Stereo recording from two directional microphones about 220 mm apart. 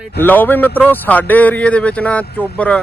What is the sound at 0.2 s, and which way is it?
Speech, 10° left (ahead or behind).